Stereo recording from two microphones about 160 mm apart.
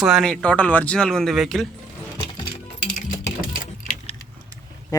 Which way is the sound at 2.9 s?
55° left (ahead or behind).